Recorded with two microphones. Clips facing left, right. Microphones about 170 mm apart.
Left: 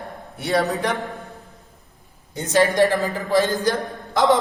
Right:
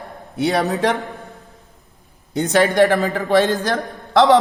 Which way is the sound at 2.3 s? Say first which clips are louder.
Right 2 dB; 65° right (ahead or behind).